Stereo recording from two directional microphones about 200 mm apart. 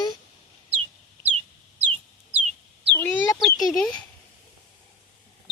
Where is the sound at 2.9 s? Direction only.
15° left (ahead or behind).